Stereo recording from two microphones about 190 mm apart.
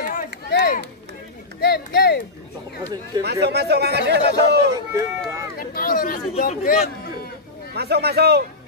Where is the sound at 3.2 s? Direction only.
60° right (ahead or behind).